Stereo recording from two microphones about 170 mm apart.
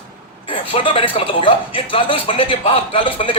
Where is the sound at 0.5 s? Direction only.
30° left (ahead or behind).